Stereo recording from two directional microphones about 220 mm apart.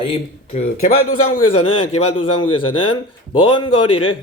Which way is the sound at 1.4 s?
25° left (ahead or behind).